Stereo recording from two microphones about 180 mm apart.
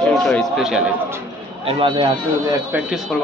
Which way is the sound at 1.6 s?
30° right (ahead or behind).